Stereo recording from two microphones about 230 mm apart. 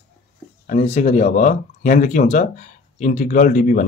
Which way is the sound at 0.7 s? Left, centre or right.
Left.